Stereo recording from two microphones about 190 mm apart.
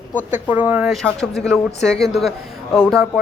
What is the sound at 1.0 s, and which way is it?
Speech, 5° left (ahead or behind).